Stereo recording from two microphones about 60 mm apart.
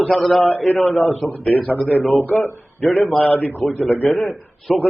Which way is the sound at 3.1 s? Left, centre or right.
Centre.